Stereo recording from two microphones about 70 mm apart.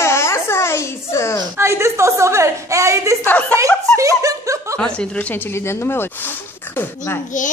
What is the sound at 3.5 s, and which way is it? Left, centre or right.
Snicker, right.